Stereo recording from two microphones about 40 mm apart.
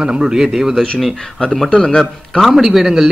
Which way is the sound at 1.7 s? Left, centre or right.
Centre.